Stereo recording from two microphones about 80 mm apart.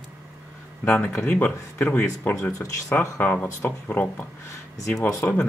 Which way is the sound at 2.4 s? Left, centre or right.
Left.